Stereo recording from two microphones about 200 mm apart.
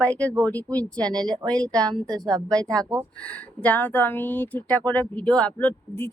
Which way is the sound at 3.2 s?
5° left (ahead or behind).